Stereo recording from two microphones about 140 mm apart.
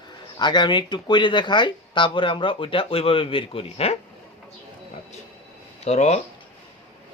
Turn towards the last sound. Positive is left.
turn(degrees=50)  # may be behind; listen again after turning